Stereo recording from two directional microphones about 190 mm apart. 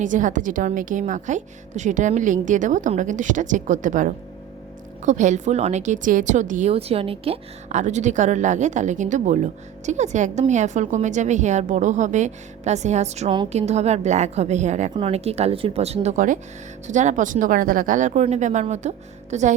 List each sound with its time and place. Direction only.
0.0 s a woman's voice: 40° right (ahead or behind)